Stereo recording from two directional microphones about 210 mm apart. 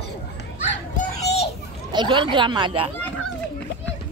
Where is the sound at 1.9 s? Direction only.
20° right (ahead or behind).